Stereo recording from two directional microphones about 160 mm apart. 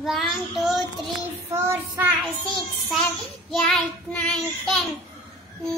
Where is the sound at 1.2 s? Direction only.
15° right (ahead or behind).